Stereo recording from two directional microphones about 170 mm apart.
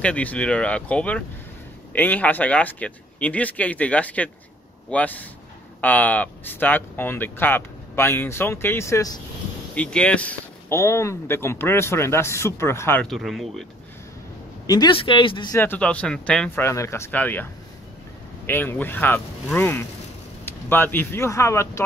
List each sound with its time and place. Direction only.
0.0 s speech: 10° left (ahead or behind)
9.8 s speech: 5° left (ahead or behind)
13.0 s speech: centre (ahead or behind)
14.7 s speech: 25° left (ahead or behind)
15.5 s speech: 10° left (ahead or behind)
18.5 s speech: 10° left (ahead or behind)